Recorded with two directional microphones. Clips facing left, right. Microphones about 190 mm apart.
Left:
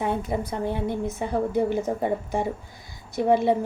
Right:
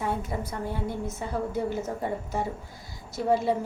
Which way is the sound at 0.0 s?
20° left (ahead or behind).